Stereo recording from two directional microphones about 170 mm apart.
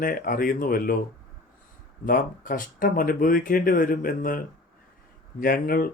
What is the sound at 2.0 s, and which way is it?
Speech, 55° left (ahead or behind).